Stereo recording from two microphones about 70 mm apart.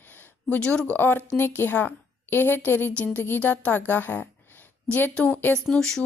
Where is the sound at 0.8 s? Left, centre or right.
Left.